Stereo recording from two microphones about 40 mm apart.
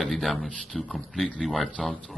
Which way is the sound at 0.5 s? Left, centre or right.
Left.